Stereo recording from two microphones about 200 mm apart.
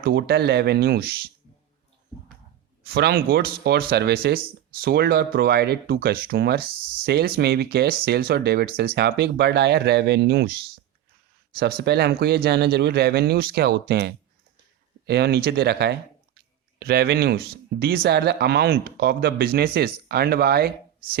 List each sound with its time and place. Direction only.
0.0 s speech: 50° right (ahead or behind)
2.8 s speech: 50° right (ahead or behind)
11.6 s speech: 55° right (ahead or behind)